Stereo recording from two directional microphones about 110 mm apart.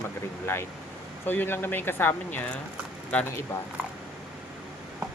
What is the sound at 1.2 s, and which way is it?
Speech, 15° left (ahead or behind).